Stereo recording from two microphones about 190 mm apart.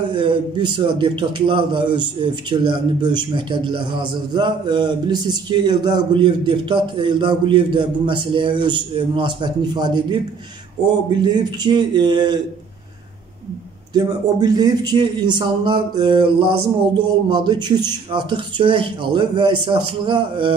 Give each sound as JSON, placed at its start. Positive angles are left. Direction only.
{"t": 0.1, "sound": "a man's voice", "side_deg": -25}
{"t": 11.2, "sound": "a man's voice", "side_deg": -20}
{"t": 13.9, "sound": "a man's voice", "side_deg": -20}